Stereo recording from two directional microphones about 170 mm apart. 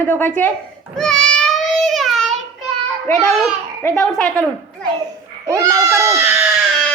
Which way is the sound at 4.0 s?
5° left (ahead or behind).